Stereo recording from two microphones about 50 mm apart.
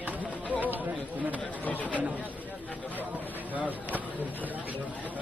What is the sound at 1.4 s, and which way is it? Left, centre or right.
Speech, left.